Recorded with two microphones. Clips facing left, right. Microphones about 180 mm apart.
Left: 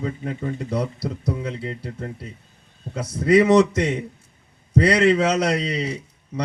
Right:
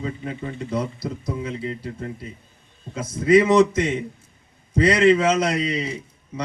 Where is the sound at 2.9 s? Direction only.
70° left (ahead or behind).